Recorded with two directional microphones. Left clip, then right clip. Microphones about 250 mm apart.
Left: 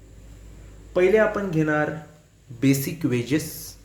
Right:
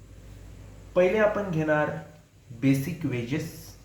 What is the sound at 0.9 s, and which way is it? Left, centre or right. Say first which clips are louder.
Speech: left 3 dB; left.